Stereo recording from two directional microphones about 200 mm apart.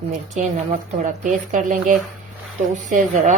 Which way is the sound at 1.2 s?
40° right (ahead or behind).